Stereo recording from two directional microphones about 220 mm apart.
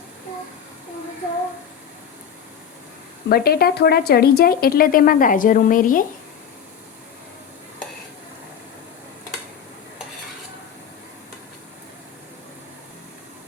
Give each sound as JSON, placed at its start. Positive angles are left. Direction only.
{"t": 3.2, "sound": "speech", "side_deg": 45}